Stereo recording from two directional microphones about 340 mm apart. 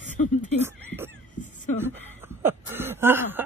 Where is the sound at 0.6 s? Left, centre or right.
Centre.